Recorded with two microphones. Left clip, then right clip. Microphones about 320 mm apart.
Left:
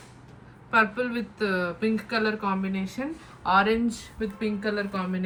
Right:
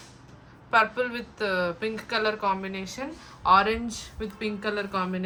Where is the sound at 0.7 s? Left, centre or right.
Right.